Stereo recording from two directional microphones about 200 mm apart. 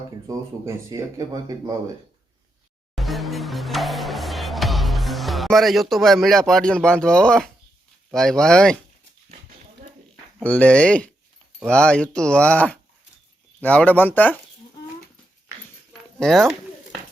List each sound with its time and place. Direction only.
0.3 s speech: 15° right (ahead or behind)
2.9 s music: centre (ahead or behind)
8.1 s speech: centre (ahead or behind)
10.4 s speech: 5° left (ahead or behind)
16.1 s speech: centre (ahead or behind)